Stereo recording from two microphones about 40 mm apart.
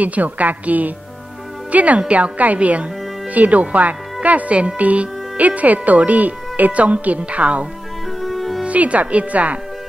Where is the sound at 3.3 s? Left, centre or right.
Right.